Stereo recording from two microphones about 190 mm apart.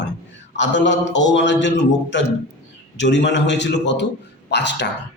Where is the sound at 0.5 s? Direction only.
70° left (ahead or behind).